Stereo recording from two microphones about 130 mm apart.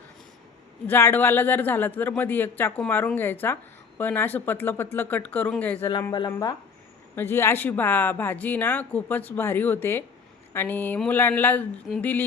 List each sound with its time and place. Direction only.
0.9 s speech: 15° left (ahead or behind)
5.9 s speech: 30° left (ahead or behind)
7.2 s speech: 20° left (ahead or behind)